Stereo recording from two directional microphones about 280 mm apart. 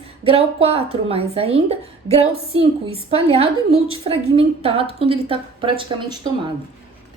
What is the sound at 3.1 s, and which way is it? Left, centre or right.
A woman's voice, right.